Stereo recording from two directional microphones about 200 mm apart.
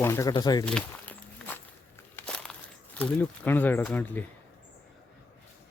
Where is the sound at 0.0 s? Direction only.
15° left (ahead or behind).